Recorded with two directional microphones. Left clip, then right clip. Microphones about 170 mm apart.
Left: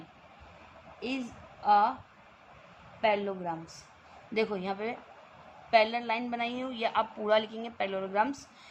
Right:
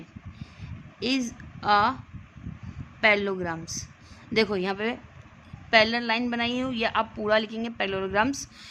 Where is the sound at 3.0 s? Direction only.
65° right (ahead or behind).